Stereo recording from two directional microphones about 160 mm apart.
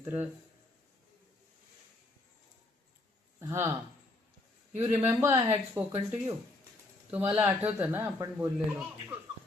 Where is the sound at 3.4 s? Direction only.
15° right (ahead or behind).